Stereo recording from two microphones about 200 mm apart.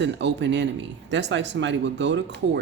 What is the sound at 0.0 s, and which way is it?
Speech, 60° right (ahead or behind).